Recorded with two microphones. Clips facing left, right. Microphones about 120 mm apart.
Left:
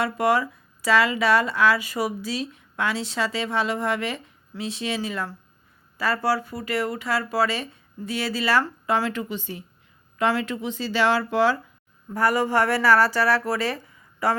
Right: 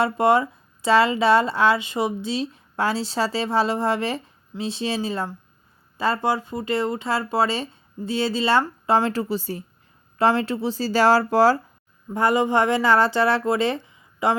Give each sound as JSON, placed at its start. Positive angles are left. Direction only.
{"t": 0.0, "sound": "speech", "side_deg": -30}
{"t": 12.1, "sound": "speech", "side_deg": -20}